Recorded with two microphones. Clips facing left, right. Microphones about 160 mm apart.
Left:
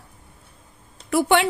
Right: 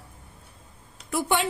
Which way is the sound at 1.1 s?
80° left.